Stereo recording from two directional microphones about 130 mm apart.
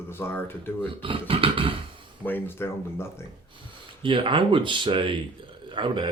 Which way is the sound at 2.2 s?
15° left (ahead or behind).